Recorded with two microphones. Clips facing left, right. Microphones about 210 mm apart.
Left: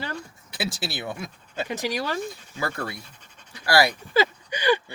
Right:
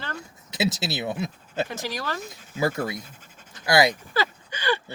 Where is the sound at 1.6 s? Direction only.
15° left (ahead or behind).